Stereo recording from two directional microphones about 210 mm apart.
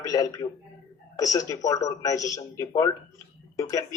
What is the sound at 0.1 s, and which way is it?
A man's voice, 15° left (ahead or behind).